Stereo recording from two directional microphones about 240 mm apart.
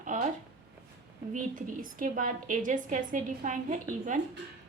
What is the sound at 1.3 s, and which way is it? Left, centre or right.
A woman's voice, right.